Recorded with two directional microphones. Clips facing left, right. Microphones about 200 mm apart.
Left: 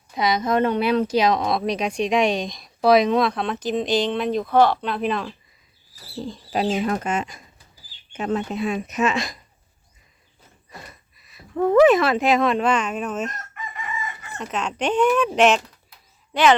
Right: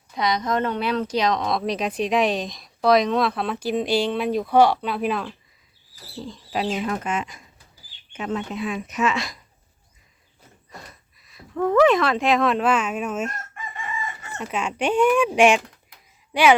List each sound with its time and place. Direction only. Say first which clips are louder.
0.1 s speech: left 2 dB; 5° left (ahead or behind)
6.2 s speech: left 3 dB; 40° left (ahead or behind)
10.7 s a sound: left 1 dB; 5° left (ahead or behind)
11.5 s speech: left 3 dB; 10° left (ahead or behind); by 16.6 s 10° right (ahead or behind)